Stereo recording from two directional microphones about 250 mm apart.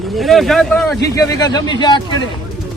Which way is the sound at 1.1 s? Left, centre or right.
Centre.